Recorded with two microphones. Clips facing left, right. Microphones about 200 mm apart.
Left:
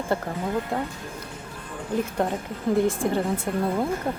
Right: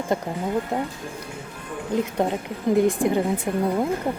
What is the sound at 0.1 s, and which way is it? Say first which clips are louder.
Speech: right 2 dB; 15° right (ahead or behind).